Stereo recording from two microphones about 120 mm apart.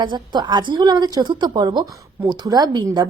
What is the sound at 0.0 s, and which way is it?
A woman's voice, 40° right (ahead or behind).